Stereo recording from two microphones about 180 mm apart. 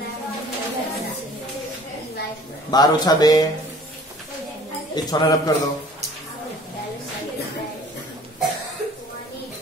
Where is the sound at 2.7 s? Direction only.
20° left (ahead or behind).